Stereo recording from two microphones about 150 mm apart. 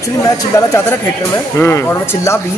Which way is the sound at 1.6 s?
15° left (ahead or behind).